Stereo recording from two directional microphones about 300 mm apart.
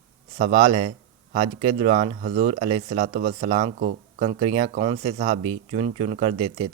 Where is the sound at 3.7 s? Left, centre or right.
Right.